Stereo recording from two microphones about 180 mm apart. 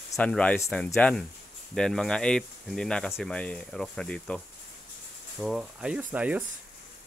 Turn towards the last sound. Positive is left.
turn(degrees=-5)  # may be behind; listen again after turning